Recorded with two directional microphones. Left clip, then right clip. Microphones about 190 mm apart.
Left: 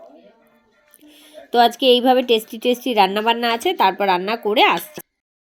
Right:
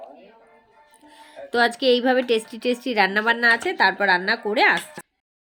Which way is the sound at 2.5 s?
20° right (ahead or behind).